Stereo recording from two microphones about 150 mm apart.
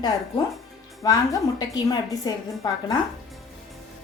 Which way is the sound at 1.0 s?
25° left (ahead or behind).